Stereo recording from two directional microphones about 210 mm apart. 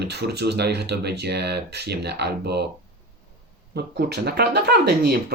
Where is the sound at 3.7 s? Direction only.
50° right (ahead or behind).